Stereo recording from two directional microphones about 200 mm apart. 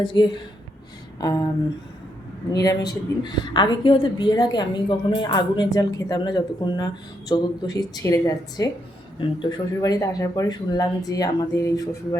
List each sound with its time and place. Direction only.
0.0 s a woman's voice: 25° left (ahead or behind)
2.5 s a woman's voice: 20° left (ahead or behind)